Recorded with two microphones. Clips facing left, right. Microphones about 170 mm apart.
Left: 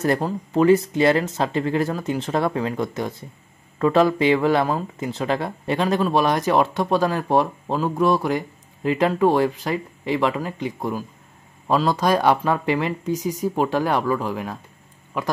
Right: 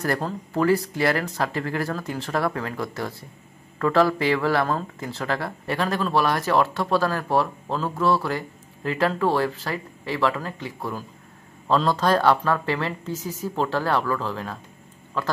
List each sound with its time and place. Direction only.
0.0 s speech: 20° left (ahead or behind)